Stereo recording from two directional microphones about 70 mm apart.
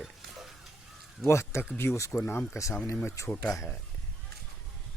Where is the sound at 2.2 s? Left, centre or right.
Left.